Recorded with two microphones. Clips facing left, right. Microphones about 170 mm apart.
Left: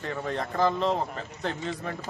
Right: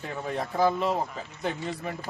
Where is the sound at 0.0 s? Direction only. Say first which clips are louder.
Left 1 dB; 10° right (ahead or behind).